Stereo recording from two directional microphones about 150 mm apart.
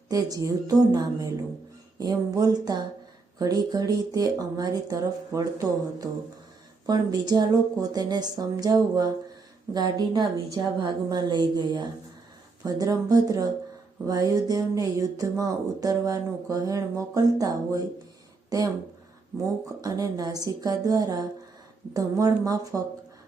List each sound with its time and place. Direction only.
0.1 s music: 25° right (ahead or behind)
19.6 s music: 25° right (ahead or behind)